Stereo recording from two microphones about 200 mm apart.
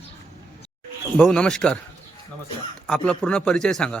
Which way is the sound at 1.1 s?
5° left (ahead or behind).